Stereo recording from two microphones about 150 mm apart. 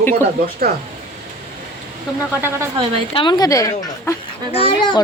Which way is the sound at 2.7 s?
40° right (ahead or behind).